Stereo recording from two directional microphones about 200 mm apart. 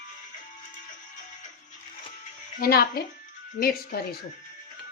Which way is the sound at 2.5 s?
50° left (ahead or behind).